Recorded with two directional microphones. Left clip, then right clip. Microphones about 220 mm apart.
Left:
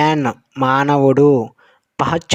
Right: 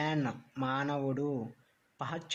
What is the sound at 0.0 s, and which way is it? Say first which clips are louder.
Speech: left 18 dB; 45° left (ahead or behind).